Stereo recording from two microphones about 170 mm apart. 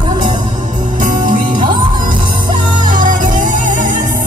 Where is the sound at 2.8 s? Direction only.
50° right (ahead or behind).